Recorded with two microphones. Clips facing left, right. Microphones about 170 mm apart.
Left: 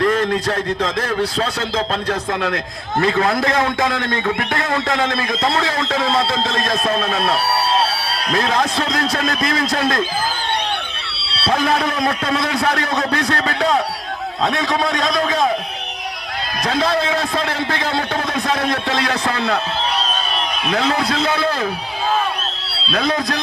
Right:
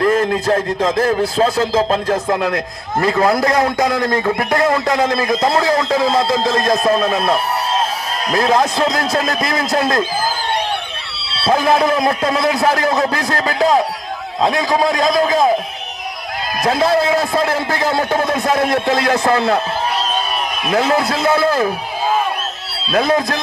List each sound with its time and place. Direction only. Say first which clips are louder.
0.0 s a man's voice: right 2 dB; 40° right (ahead or behind)
8.4 s a man's voice: right 5 dB; 35° right (ahead or behind)
11.5 s a man's voice: right 4 dB; 30° right (ahead or behind)
16.6 s a man's voice: right 4 dB; 40° right (ahead or behind)
21.2 s a man's voice: right 5 dB; 40° right (ahead or behind)